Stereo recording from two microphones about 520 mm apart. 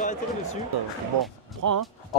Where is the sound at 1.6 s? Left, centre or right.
Right.